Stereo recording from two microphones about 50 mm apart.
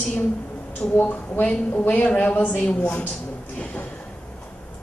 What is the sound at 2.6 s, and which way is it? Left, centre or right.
Speech, left.